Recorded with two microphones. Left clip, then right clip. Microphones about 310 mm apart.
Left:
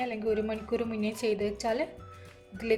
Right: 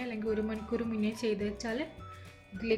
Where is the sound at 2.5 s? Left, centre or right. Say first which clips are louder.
Left 2 dB; centre.